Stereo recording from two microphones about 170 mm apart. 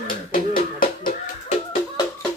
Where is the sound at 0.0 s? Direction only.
55° left (ahead or behind).